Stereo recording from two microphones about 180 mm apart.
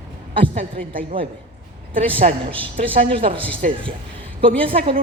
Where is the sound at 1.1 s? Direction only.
30° right (ahead or behind).